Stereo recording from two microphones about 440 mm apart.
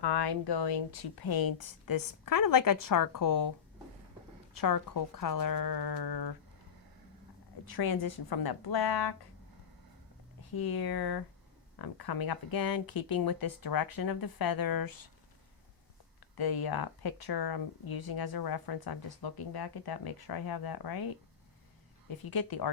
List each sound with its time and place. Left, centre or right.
0.0 s speech: left
4.5 s speech: left
7.7 s speech: left
10.5 s speech: left
16.4 s speech: left
22.2 s speech: left